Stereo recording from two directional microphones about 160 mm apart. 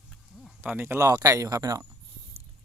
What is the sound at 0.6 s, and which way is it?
Speech, 10° right (ahead or behind).